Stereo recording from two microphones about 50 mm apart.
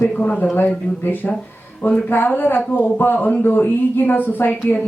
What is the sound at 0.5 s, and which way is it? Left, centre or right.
Speech, left.